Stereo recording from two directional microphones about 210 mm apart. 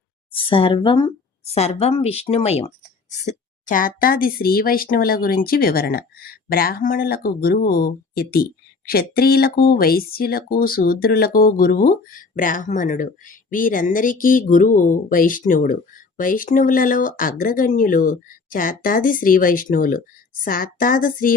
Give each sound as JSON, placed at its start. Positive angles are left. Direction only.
{"t": 0.3, "sound": "speech", "side_deg": 25}